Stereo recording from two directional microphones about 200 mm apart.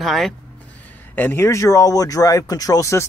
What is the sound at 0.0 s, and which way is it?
Speech, centre (ahead or behind).